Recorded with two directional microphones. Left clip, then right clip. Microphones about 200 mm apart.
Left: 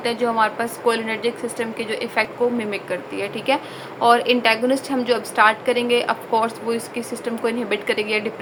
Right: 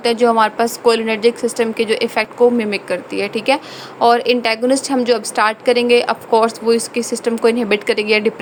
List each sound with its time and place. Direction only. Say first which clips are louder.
0.0 s a woman's voice: right 6 dB; 45° right (ahead or behind)